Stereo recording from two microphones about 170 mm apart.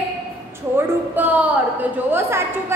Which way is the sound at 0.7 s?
10° right (ahead or behind).